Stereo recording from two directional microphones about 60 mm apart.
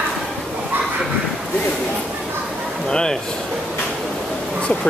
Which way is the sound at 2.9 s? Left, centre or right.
Centre.